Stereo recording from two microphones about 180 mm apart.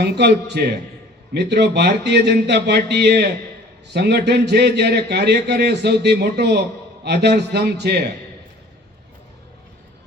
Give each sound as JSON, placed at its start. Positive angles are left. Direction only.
{"t": 0.0, "sound": "a man's voice", "side_deg": -65}